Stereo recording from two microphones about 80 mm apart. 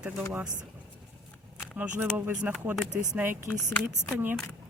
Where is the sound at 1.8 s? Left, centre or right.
Right.